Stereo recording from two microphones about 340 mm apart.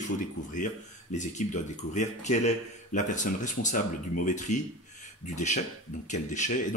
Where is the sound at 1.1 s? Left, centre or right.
Left.